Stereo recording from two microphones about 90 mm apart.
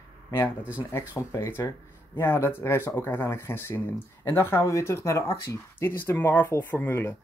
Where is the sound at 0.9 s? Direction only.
30° left (ahead or behind).